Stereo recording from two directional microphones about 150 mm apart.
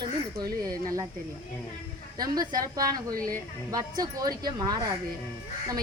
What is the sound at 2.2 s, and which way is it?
A woman's voice, 25° right (ahead or behind).